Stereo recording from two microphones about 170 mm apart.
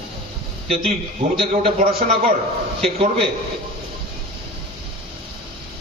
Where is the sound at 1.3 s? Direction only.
30° right (ahead or behind).